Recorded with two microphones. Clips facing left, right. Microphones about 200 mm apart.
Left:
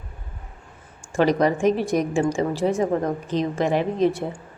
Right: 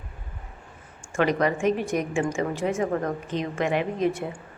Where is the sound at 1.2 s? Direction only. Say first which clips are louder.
Left 4 dB; 35° left (ahead or behind).